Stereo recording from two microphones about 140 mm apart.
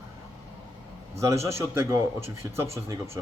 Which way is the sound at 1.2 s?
20° right (ahead or behind).